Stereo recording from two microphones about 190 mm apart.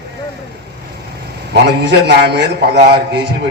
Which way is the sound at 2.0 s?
60° right (ahead or behind).